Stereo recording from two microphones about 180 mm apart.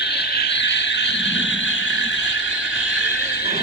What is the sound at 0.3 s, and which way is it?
Frog, 70° left (ahead or behind).